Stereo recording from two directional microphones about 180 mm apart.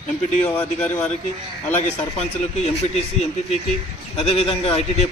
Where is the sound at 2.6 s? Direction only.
35° left (ahead or behind).